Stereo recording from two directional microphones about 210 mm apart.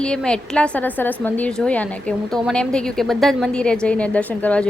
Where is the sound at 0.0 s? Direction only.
5° left (ahead or behind).